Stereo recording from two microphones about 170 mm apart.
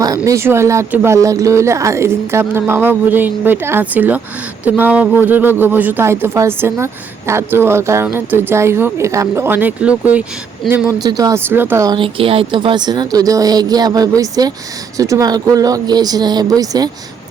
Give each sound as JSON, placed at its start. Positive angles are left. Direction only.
{"t": 0.3, "sound": "speech", "side_deg": -15}
{"t": 10.8, "sound": "speech", "side_deg": -20}
{"t": 11.9, "sound": "a woman's voice", "side_deg": -30}